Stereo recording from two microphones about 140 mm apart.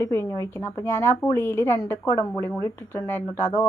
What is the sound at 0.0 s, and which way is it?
Speech, 20° left (ahead or behind).